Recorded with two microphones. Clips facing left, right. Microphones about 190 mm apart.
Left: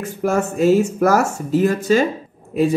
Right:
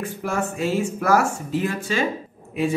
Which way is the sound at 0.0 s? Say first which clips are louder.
Left 6 dB; 45° left (ahead or behind).